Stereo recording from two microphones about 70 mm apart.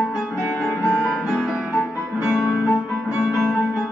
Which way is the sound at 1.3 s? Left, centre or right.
Centre.